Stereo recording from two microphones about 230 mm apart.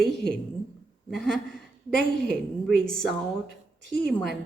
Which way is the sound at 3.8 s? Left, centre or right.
Right.